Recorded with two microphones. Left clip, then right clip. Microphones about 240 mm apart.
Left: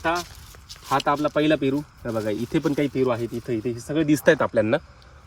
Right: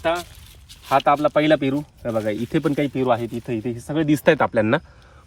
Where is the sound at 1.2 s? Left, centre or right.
Centre.